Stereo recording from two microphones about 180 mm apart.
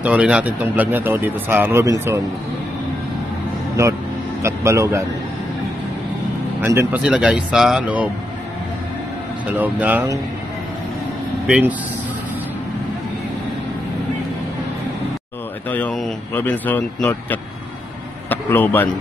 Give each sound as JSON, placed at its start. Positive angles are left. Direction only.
{"t": 0.0, "sound": "speech", "side_deg": -5}
{"t": 4.4, "sound": "speech", "side_deg": -15}
{"t": 6.6, "sound": "speech", "side_deg": -15}
{"t": 9.5, "sound": "speech", "side_deg": -10}
{"t": 11.4, "sound": "speech", "side_deg": -5}
{"t": 15.7, "sound": "a man's voice", "side_deg": 5}